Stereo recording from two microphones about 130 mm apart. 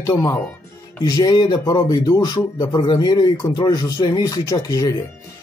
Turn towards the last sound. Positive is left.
turn(degrees=30)  # may be behind; listen again after turning